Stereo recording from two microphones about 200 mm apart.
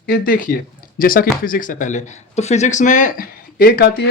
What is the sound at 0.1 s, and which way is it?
Speech, 45° left (ahead or behind).